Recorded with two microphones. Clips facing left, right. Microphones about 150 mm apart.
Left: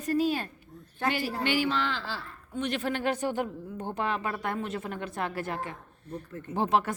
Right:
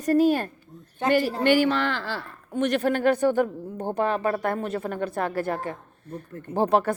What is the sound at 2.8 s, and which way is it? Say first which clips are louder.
A woman's voice: right 9 dB; 50° right (ahead or behind).